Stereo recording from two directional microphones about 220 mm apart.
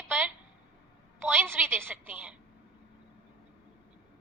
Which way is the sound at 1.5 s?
10° right (ahead or behind).